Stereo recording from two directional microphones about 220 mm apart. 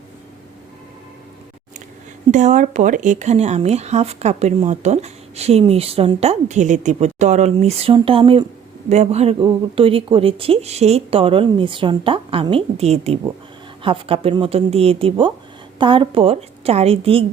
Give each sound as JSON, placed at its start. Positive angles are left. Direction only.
{"t": 2.3, "sound": "speech", "side_deg": -30}